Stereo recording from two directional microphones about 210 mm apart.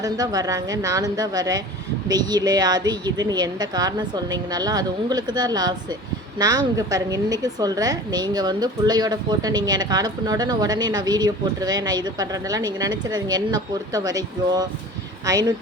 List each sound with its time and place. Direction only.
0.0 s a woman's voice: 20° right (ahead or behind)